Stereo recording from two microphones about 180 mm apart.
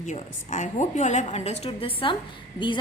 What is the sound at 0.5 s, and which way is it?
A woman's voice, 40° left (ahead or behind).